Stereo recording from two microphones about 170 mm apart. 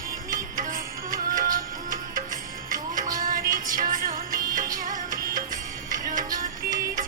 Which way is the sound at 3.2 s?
55° right (ahead or behind).